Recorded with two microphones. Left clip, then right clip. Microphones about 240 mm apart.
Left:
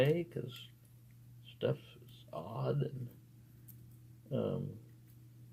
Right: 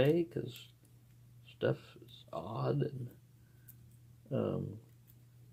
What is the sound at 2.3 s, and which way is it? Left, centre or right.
Speech, right.